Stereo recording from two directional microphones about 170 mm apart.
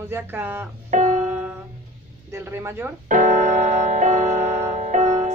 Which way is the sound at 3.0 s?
50° right (ahead or behind).